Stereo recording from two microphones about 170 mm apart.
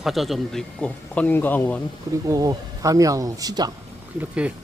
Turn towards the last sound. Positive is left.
turn(degrees=-10)  # may be behind; listen again after turning